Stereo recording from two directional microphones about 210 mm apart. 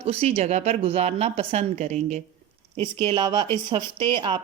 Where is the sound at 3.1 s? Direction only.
20° right (ahead or behind).